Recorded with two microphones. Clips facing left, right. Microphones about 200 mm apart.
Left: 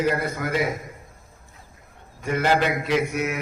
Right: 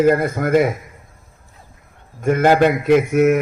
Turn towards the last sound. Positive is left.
turn(degrees=-50)  # may be behind; listen again after turning